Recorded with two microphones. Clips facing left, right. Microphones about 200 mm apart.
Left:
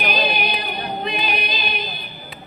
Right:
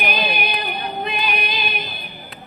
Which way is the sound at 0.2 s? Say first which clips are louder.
Left 2 dB; 60° right (ahead or behind).